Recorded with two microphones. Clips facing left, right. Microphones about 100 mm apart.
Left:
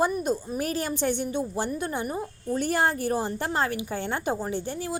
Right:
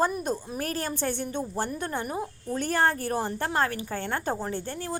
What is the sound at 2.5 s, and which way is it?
A woman's voice, 10° left (ahead or behind).